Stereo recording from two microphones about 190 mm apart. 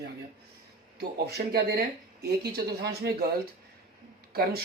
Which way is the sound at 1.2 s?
55° right (ahead or behind).